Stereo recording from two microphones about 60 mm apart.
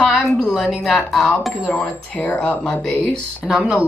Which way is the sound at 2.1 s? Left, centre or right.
Left.